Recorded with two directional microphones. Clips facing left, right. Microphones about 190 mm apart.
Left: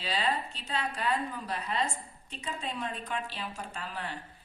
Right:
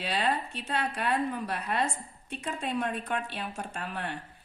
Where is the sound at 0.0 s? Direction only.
60° right (ahead or behind).